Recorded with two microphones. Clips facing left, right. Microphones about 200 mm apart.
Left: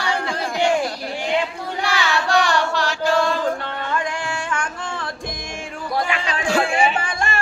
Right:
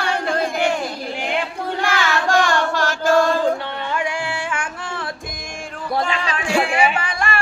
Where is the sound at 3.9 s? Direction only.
10° right (ahead or behind).